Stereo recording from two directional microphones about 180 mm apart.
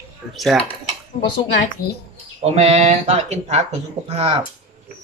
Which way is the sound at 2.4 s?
35° right (ahead or behind).